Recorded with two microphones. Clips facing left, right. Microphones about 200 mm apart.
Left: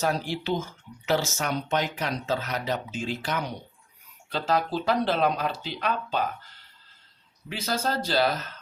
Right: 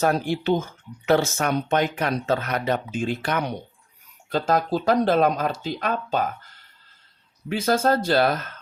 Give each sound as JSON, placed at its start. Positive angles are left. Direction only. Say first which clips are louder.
{"t": 0.0, "sound": "speech", "louder": "right 6 dB", "side_deg": -55}
{"t": 4.3, "sound": "speech", "louder": "right 4 dB", "side_deg": -45}
{"t": 7.5, "sound": "speech", "louder": "right 8 dB", "side_deg": -50}